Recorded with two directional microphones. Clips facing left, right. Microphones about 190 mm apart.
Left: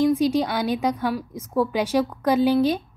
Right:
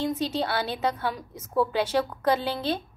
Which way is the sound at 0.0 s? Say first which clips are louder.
Left 8 dB; 10° left (ahead or behind).